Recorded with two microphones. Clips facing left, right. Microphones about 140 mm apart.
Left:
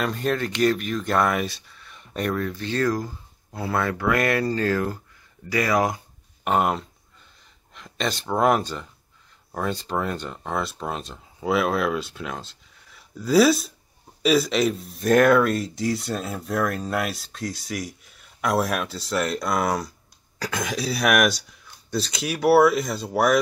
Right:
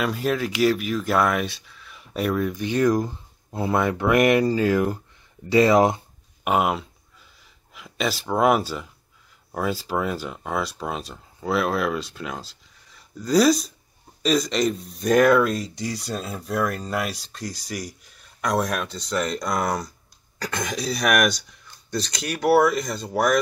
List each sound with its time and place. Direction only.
0.0 s speech: 5° right (ahead or behind); by 6.0 s 25° right (ahead or behind)
6.4 s a sound: 5° right (ahead or behind)
7.7 s speech: 5° right (ahead or behind)